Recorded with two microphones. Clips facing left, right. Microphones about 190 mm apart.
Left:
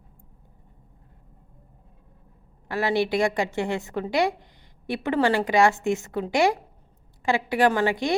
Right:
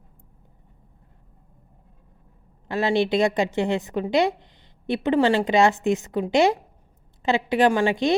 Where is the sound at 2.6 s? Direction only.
20° right (ahead or behind).